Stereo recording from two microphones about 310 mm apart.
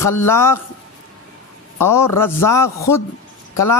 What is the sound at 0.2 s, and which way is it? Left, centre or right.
Speech, centre.